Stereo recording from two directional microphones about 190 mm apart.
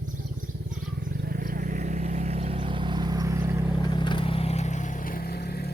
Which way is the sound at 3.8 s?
25° left (ahead or behind).